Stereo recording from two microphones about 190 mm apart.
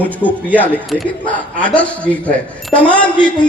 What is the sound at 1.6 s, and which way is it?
A man's voice, 5° left (ahead or behind).